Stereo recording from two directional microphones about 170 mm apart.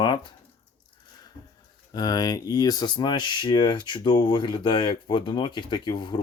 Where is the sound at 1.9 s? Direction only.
20° left (ahead or behind).